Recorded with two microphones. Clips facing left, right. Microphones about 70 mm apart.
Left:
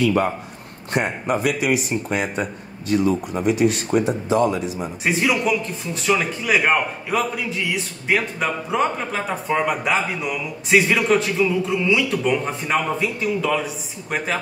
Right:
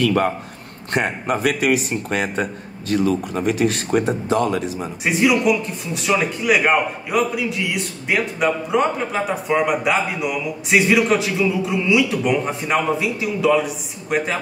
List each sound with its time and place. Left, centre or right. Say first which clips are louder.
0.9 s speech: right 1 dB; right
2.0 s a man's voice: right 3 dB; right
2.9 s speech: even; right
5.0 s a man's voice: right 4 dB; centre